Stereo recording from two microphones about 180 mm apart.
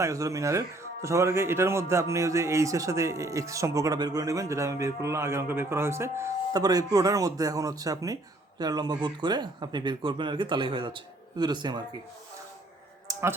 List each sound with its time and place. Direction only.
0.0 s a man's voice: 15° right (ahead or behind)